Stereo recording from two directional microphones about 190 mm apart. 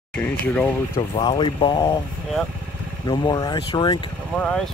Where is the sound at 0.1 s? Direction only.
5° left (ahead or behind).